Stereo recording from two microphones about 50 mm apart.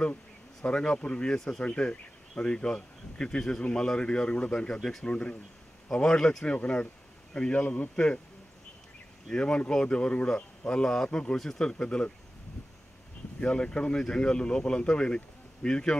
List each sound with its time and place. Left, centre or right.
0.7 s a man's voice: left
4.7 s speech: centre
5.0 s a man's voice: left
9.3 s a man's voice: centre
13.4 s speech: centre